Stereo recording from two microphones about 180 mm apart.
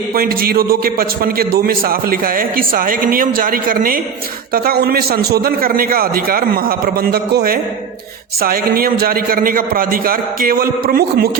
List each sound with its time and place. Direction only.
0.1 s a man's voice: 55° right (ahead or behind)